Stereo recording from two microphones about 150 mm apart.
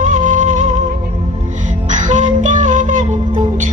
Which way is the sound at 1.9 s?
55° right (ahead or behind).